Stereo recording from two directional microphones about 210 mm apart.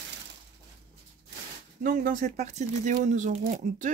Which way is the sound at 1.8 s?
40° right (ahead or behind).